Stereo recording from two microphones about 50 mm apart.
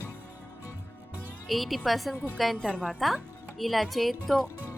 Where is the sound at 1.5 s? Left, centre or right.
Centre.